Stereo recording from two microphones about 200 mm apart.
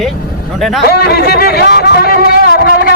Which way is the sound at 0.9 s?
55° left (ahead or behind).